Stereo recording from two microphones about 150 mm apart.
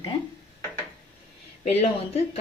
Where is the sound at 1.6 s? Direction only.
45° left (ahead or behind).